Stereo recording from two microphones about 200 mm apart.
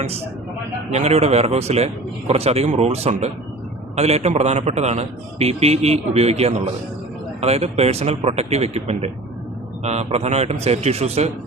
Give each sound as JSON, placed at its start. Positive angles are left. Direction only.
{"t": 0.9, "sound": "a man's voice", "side_deg": -30}